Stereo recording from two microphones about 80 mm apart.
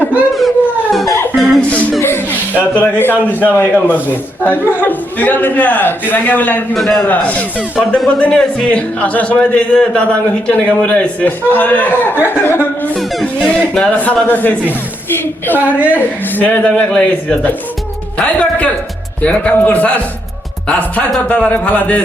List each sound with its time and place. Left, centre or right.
0.3 s music: centre
2.0 s music: left
2.7 s a man's voice: left
6.7 s a man's voice: centre
7.1 s a man's voice: centre
13.7 s a man's voice: centre
15.5 s a woman's voice: right
16.0 s a man's voice: left